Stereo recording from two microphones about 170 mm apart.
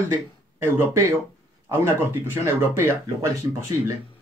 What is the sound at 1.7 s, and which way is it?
Speech, 15° right (ahead or behind).